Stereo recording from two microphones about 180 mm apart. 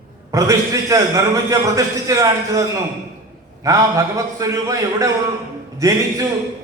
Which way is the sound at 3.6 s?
20° right (ahead or behind).